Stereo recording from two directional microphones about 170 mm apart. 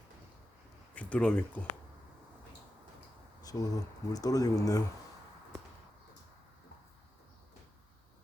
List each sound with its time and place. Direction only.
0.9 s speech: 10° left (ahead or behind)
3.4 s speech: 20° left (ahead or behind)